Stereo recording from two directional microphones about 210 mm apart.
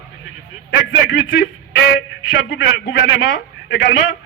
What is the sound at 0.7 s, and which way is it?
Speech, 55° left (ahead or behind).